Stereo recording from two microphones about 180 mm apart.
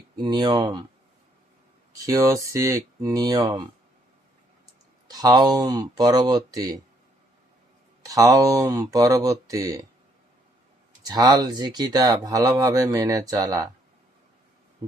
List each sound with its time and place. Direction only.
0.2 s speech: 25° right (ahead or behind)
1.9 s speech: 20° right (ahead or behind)
5.0 s speech: 20° right (ahead or behind)
8.0 s speech: 20° right (ahead or behind)
11.0 s speech: 20° right (ahead or behind)
14.8 s owl: 20° right (ahead or behind)